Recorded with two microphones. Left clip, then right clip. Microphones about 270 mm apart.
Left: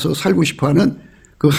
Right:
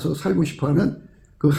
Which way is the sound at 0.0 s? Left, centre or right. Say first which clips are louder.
Left 7 dB; left.